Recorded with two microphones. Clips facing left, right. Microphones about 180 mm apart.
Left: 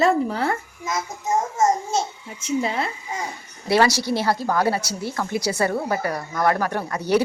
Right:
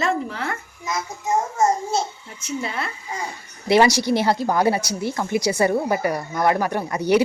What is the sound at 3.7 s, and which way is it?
A woman's voice, 15° right (ahead or behind).